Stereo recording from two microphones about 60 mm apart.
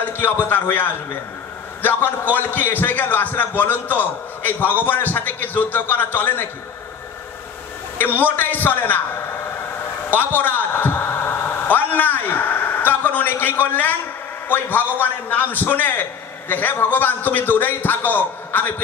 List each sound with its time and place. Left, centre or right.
0.0 s a man's voice: left
8.0 s a man's voice: left
10.1 s a sound: left
14.5 s a man's voice: left